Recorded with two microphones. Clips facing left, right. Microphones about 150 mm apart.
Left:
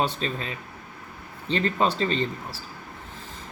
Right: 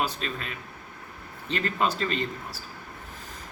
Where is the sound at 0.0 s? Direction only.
30° left (ahead or behind).